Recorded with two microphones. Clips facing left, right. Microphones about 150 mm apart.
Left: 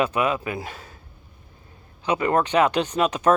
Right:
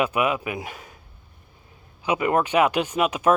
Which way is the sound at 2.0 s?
10° right (ahead or behind).